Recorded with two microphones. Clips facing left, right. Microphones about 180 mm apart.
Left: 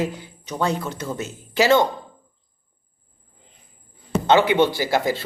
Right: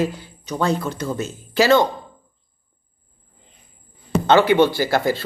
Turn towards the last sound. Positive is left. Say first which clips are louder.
# right 2 dB
turn(degrees=15)  # may be behind; listen again after turning